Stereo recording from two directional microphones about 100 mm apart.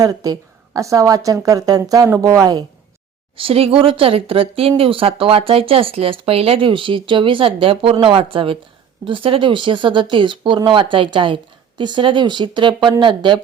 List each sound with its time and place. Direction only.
0.0 s a woman's voice: 35° right (ahead or behind)
3.3 s speech: 70° right (ahead or behind); by 13.4 s 55° right (ahead or behind)